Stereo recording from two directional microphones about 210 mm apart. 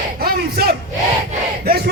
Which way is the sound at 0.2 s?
45° right (ahead or behind).